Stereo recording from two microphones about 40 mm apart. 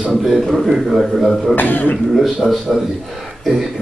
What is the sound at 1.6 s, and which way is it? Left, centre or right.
Speech, left.